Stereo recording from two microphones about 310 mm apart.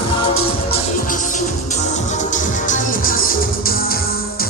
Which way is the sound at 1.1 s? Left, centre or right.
Left.